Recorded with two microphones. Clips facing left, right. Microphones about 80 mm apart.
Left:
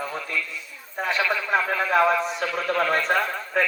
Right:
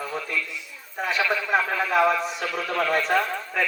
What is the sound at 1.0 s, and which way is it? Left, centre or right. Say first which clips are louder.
A man's voice: even; left.